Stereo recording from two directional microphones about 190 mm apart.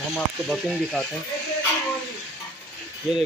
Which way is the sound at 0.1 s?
Centre (ahead or behind).